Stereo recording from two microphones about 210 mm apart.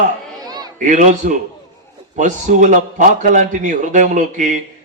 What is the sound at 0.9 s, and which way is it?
A man's voice, 35° right (ahead or behind).